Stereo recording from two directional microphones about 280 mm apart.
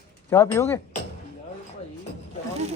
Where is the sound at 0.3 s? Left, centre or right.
Centre.